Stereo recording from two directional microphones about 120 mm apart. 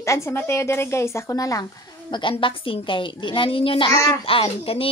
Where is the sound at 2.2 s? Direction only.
45° left (ahead or behind).